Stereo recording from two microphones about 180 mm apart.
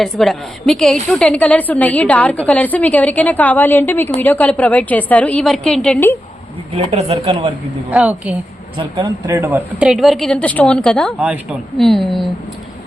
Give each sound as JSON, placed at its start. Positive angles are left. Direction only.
{"t": 0.0, "sound": "a woman's voice", "side_deg": 0}
{"t": 6.7, "sound": "a man's voice", "side_deg": -35}
{"t": 7.9, "sound": "speech", "side_deg": -5}
{"t": 8.8, "sound": "speech", "side_deg": -20}
{"t": 9.8, "sound": "a woman's voice", "side_deg": 0}